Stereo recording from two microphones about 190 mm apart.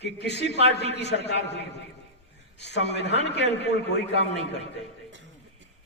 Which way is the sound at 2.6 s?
65° left (ahead or behind).